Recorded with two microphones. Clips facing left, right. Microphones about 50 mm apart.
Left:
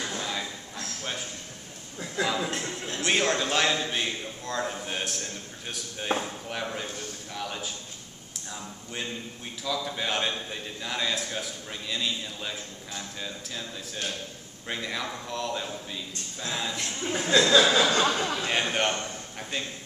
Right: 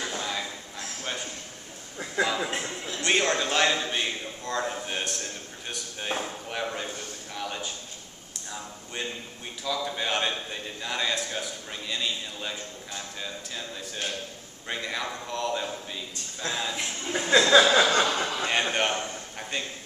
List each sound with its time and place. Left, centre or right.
0.0 s a sound: centre
2.2 s speech: centre
3.0 s a man's voice: centre
14.7 s a man's voice: centre
17.3 s a sound: centre
18.5 s a man's voice: centre